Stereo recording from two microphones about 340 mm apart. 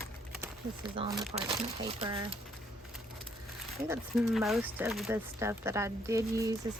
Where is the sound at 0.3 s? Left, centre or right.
Centre.